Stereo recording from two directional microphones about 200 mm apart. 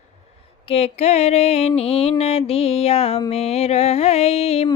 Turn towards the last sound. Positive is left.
turn(degrees=30)  # may be behind; listen again after turning